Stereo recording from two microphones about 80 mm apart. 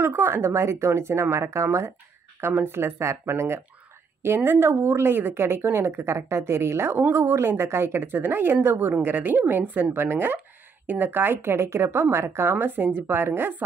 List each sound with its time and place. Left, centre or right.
0.0 s a woman's voice: right